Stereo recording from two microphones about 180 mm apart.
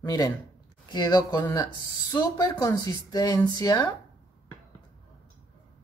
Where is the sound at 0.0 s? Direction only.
20° left (ahead or behind).